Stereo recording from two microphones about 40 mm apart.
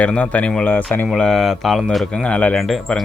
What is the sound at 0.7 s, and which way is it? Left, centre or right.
Speech, left.